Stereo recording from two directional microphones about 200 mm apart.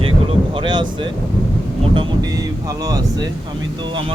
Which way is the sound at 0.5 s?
25° right (ahead or behind).